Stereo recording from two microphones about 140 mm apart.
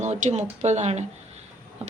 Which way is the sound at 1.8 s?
45° right (ahead or behind).